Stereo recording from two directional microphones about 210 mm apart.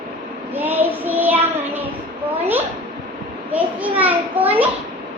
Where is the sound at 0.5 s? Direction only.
10° right (ahead or behind).